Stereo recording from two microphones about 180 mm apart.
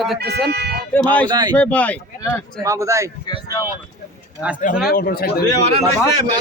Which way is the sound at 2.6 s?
15° right (ahead or behind).